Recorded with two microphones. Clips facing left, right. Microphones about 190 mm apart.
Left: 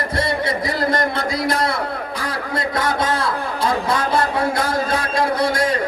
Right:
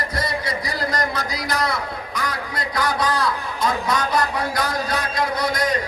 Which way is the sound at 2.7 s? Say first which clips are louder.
Even; 25° left (ahead or behind).